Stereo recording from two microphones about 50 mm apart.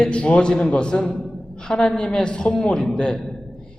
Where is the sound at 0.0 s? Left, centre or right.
Left.